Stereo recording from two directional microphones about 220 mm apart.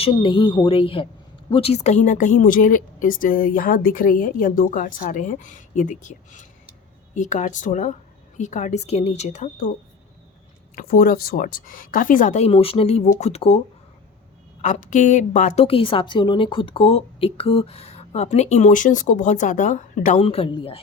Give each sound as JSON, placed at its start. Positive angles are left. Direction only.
{"t": 0.0, "sound": "a woman's voice", "side_deg": 20}
{"t": 10.8, "sound": "speech", "side_deg": 40}
{"t": 14.6, "sound": "a woman's voice", "side_deg": 35}